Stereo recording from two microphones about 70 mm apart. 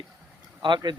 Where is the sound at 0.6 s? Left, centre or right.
Right.